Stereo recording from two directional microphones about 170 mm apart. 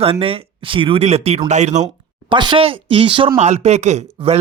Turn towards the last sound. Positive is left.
turn(degrees=-40)  # may be behind; listen again after turning